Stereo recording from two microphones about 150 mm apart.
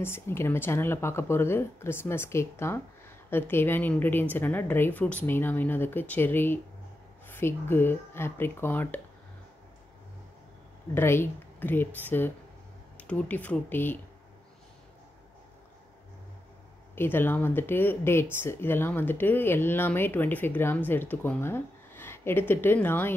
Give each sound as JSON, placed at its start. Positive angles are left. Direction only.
{"t": 0.0, "sound": "speech", "side_deg": 15}
{"t": 11.0, "sound": "speech", "side_deg": 15}
{"t": 16.9, "sound": "speech", "side_deg": 15}